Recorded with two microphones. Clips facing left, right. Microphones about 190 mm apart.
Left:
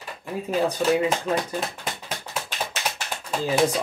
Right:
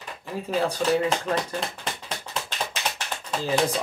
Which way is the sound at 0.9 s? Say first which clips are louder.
Left 1 dB; 10° left (ahead or behind).